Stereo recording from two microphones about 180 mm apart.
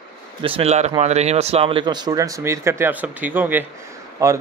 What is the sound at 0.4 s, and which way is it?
A man's voice, 30° right (ahead or behind).